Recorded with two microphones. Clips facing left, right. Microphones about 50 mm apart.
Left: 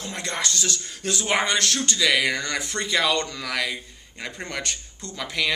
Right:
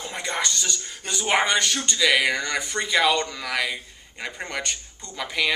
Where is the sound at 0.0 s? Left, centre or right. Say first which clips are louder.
Right 1 dB; centre.